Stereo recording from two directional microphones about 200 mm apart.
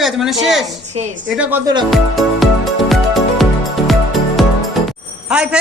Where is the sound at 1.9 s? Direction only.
Centre (ahead or behind).